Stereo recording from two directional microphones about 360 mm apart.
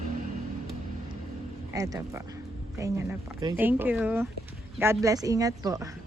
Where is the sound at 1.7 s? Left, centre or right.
Centre.